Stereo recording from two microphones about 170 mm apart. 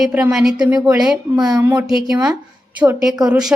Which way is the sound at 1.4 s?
20° right (ahead or behind).